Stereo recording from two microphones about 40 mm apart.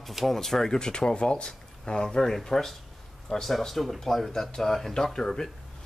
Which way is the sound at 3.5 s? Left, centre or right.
Centre.